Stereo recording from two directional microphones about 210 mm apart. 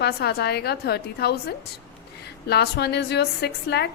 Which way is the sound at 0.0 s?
50° left (ahead or behind).